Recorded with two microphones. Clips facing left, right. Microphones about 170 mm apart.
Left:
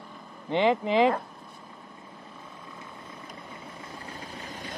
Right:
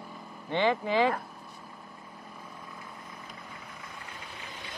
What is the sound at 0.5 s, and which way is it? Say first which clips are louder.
Speech: left 3 dB; 15° left (ahead or behind).